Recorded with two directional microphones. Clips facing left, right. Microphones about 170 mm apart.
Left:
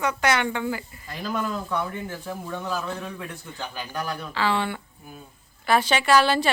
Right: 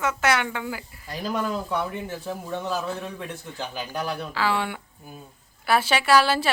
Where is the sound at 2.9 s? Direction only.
5° right (ahead or behind).